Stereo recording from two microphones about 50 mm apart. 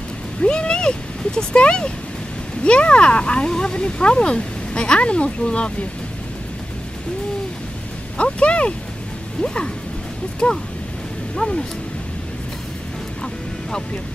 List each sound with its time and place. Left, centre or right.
0.4 s speech: centre
8.2 s speech: left
13.2 s duck: centre